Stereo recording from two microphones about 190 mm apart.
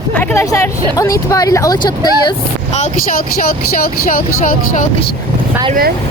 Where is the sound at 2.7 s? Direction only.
45° left (ahead or behind).